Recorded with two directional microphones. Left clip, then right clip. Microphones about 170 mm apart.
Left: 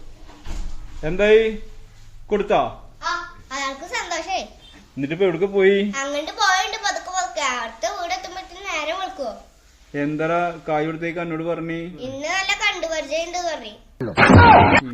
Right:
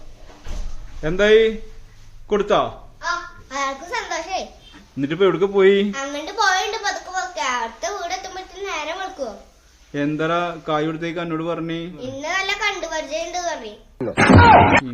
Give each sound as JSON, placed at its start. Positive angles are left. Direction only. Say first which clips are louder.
{"t": 1.0, "sound": "a man's voice", "louder": "right 1 dB", "side_deg": -15}
{"t": 3.5, "sound": "a sound", "louder": "right 2 dB", "side_deg": -10}
{"t": 4.9, "sound": "a man's voice", "louder": "right 2 dB", "side_deg": -20}
{"t": 5.9, "sound": "a sound", "louder": "left 2 dB", "side_deg": -10}
{"t": 9.9, "sound": "a man's voice", "louder": "right 1 dB", "side_deg": -15}
{"t": 14.2, "sound": "speech", "louder": "even", "side_deg": 0}